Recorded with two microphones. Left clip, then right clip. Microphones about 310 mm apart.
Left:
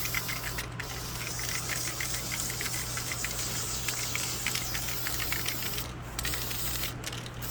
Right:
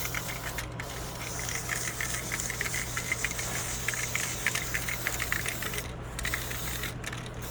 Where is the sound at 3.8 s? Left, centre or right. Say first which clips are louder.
Right 3 dB; centre.